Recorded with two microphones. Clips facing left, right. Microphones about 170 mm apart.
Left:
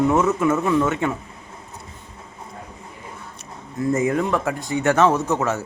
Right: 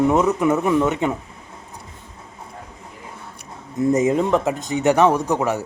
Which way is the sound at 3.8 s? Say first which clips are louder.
Right 3 dB; 20° right (ahead or behind).